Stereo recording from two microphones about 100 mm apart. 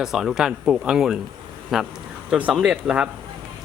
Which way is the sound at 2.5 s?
5° right (ahead or behind).